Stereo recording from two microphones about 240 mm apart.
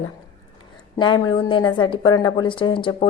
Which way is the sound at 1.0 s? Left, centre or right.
Centre.